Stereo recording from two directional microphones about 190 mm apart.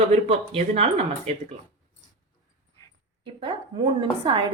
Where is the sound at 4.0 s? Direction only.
25° right (ahead or behind).